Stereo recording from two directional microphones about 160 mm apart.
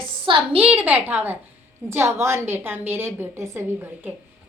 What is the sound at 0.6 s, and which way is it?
A woman's voice, 10° right (ahead or behind).